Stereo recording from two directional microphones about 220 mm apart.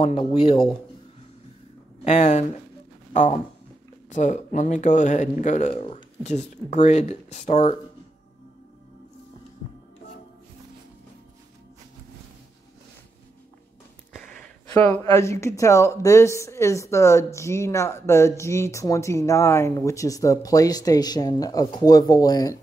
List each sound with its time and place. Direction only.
0.0 s speech: 25° left (ahead or behind)
2.0 s speech: 30° left (ahead or behind)
5.7 s speech: 25° left (ahead or behind)
14.7 s speech: 10° left (ahead or behind)